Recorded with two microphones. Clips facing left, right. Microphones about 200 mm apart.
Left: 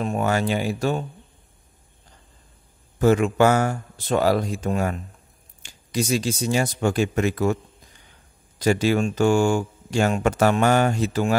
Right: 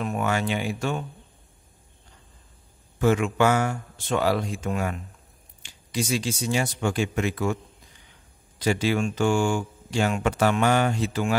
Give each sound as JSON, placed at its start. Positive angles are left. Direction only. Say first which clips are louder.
{"t": 0.0, "sound": "speech", "louder": "left 3 dB", "side_deg": 35}
{"t": 3.0, "sound": "speech", "louder": "left 4 dB", "side_deg": 40}
{"t": 8.5, "sound": "speech", "louder": "left 4 dB", "side_deg": 45}